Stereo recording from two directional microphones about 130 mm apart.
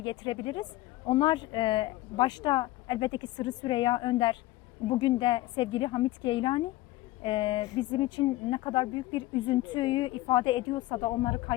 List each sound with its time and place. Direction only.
0.0 s speech: 35° left (ahead or behind)